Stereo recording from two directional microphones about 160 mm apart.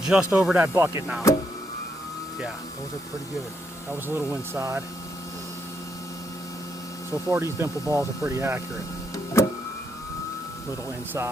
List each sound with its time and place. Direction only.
0.0 s speech: 5° right (ahead or behind)
1.3 s a sound: 20° left (ahead or behind)
4.1 s speech: 20° right (ahead or behind)
7.3 s speech: 20° right (ahead or behind)
9.1 s power windows: 20° left (ahead or behind)